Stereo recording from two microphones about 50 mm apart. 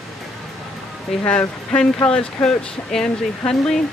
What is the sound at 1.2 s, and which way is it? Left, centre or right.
Speech, left.